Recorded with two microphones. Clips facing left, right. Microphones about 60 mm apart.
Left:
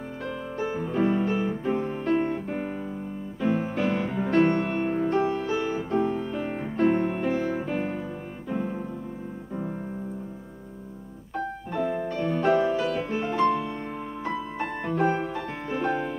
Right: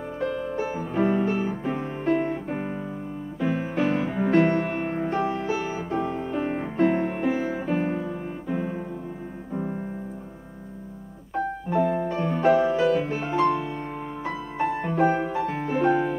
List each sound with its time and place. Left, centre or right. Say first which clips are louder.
0.3 s music: right 2 dB; centre
1.9 s music: right 2 dB; centre
2.1 s music: even; centre
11.3 s music: right 5 dB; centre
15.0 s music: right 3 dB; centre